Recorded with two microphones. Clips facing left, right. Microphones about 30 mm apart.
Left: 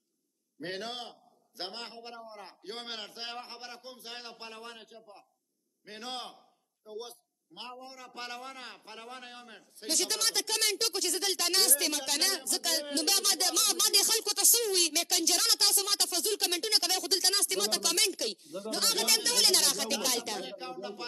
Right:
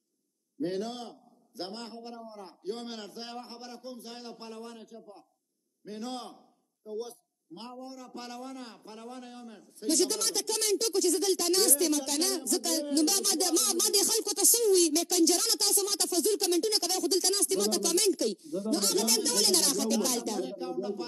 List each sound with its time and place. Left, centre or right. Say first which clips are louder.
0.6 s a man's voice: right 5 dB; left